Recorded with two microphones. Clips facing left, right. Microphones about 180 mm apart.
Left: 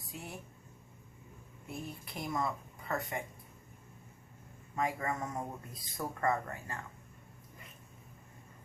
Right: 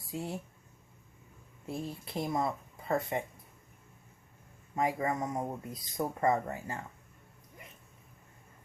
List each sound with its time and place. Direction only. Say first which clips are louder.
0.1 s speech: right 8 dB; 25° right (ahead or behind)
1.6 s speech: right 5 dB; 25° right (ahead or behind)
4.7 s speech: right 4 dB; 25° right (ahead or behind)